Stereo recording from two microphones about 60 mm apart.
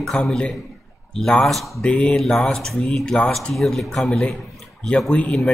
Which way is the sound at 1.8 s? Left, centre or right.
Centre.